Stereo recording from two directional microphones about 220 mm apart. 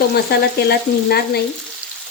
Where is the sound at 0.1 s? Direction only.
45° left (ahead or behind).